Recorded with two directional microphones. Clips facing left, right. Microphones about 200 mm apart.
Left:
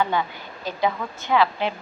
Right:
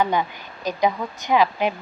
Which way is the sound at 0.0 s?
15° right (ahead or behind).